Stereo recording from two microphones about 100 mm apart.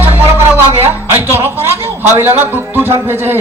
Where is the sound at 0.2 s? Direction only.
20° right (ahead or behind).